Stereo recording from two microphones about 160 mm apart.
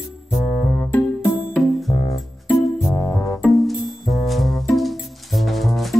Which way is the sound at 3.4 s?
Centre (ahead or behind).